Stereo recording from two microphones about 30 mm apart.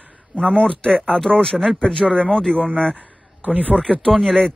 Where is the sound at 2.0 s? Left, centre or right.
Centre.